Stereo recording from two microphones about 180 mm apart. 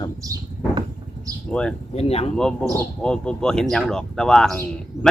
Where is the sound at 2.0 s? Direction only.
35° left (ahead or behind).